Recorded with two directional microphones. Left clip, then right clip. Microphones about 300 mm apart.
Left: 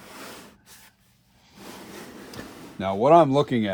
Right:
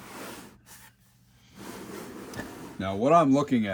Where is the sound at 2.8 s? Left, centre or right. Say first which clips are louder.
Left 5 dB; left.